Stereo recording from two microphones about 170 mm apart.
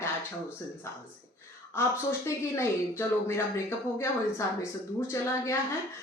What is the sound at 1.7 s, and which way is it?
A woman's voice, 15° left (ahead or behind).